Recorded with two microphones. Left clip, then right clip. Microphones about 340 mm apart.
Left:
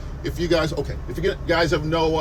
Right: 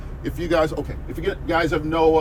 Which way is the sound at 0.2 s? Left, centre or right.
Centre.